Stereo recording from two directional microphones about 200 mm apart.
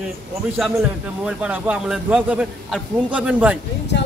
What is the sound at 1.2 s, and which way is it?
A man's voice, 5° right (ahead or behind).